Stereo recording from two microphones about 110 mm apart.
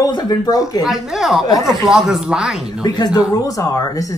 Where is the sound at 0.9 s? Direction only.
5° right (ahead or behind).